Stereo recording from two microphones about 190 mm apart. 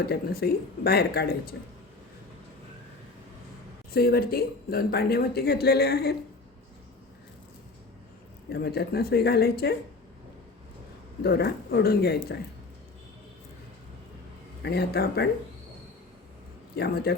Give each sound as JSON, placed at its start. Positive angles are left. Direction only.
{"t": 0.0, "sound": "speech", "side_deg": 55}
{"t": 3.9, "sound": "speech", "side_deg": 55}
{"t": 8.4, "sound": "speech", "side_deg": 60}
{"t": 11.2, "sound": "speech", "side_deg": 55}
{"t": 14.6, "sound": "speech", "side_deg": 60}
{"t": 16.7, "sound": "speech", "side_deg": 55}